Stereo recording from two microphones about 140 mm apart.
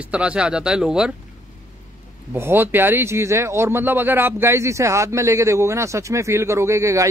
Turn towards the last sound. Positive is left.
turn(degrees=-20)  # may be behind; listen again after turning